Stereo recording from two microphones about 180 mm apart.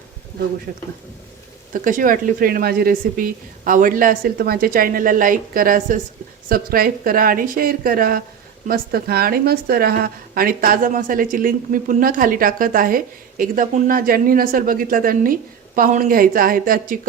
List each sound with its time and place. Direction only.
0.7 s a woman's voice: 45° right (ahead or behind)